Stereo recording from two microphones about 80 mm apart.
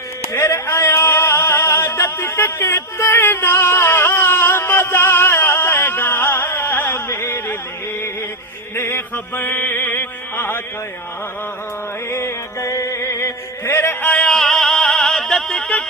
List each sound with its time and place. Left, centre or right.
0.3 s music: left
8.7 s music: left
12.1 s music: left
14.1 s music: centre